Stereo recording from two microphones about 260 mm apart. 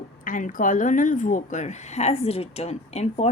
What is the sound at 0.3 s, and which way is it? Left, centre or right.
A woman's voice, left.